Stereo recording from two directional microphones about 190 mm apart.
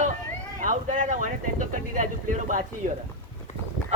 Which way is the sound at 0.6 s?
45° right (ahead or behind).